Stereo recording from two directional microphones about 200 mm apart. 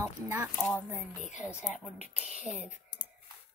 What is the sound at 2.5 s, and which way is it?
Speech, 35° left (ahead or behind).